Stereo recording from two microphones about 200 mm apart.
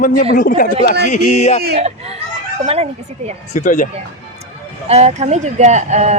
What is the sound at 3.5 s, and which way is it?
Speech, 40° left (ahead or behind).